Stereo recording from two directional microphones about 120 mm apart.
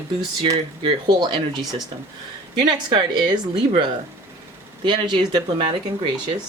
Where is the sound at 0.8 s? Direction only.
40° right (ahead or behind).